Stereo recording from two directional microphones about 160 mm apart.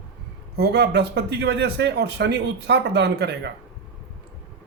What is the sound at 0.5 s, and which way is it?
Speech, 90° right.